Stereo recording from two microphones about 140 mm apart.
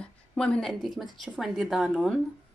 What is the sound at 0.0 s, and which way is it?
A woman's voice, 10° left (ahead or behind).